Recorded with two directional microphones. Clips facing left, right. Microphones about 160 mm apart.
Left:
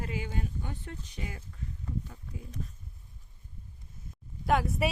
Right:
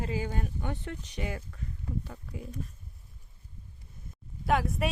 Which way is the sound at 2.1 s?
90° right.